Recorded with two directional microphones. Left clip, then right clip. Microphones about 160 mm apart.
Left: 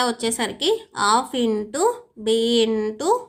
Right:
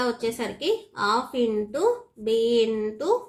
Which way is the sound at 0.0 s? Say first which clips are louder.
Left 4 dB; 50° left (ahead or behind).